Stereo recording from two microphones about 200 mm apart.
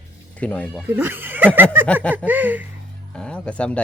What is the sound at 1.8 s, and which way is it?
Speech, 5° left (ahead or behind).